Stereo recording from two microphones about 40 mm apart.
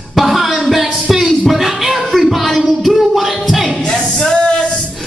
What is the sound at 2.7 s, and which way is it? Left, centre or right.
Music, centre.